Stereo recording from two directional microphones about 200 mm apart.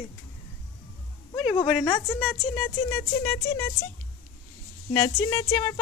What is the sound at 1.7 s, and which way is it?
Speech, centre (ahead or behind).